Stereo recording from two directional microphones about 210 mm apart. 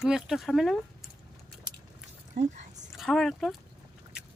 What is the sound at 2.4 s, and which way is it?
Speech, 50° right (ahead or behind).